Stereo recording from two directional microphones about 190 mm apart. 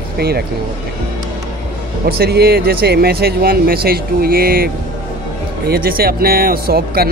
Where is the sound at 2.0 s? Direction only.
55° right (ahead or behind).